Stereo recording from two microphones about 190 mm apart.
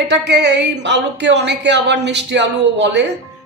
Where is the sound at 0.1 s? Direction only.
65° right (ahead or behind).